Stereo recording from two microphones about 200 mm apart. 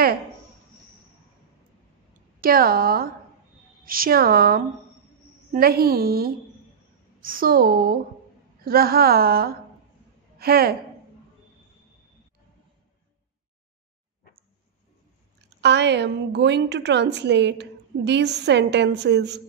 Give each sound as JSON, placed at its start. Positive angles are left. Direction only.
{"t": 2.4, "sound": "a woman's voice", "side_deg": -50}
{"t": 15.6, "sound": "a woman's voice", "side_deg": -60}